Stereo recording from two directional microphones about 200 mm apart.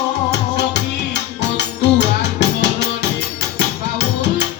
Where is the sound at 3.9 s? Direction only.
60° left (ahead or behind).